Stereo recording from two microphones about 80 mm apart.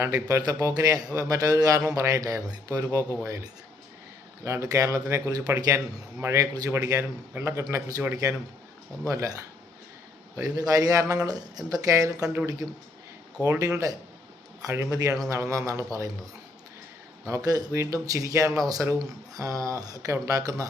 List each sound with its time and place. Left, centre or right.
0.0 s a man's voice: right
4.4 s a man's voice: right
7.7 s a man's voice: right
13.6 s a man's voice: right
17.2 s a man's voice: right